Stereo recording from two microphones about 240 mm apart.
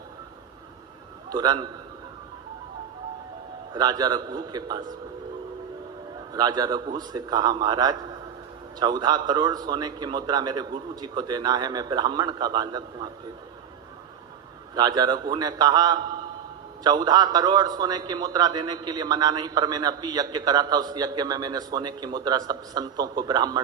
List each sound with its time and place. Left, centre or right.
1.3 s a man's voice: centre
3.8 s a man's voice: centre
6.3 s a man's voice: centre
14.8 s a man's voice: centre